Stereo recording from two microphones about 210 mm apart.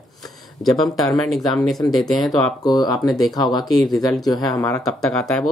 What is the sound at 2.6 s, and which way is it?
Speech, 20° left (ahead or behind).